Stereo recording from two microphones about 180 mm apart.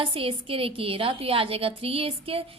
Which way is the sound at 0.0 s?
30° right (ahead or behind).